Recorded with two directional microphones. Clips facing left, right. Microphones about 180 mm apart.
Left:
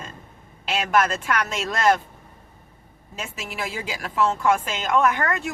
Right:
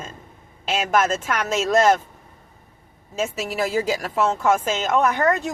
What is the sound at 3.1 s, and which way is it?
Speech, 40° right (ahead or behind).